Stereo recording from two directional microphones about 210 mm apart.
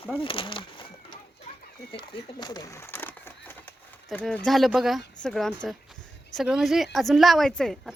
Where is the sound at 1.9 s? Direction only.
25° left (ahead or behind).